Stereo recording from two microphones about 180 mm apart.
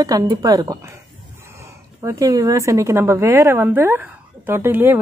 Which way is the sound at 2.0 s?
15° right (ahead or behind).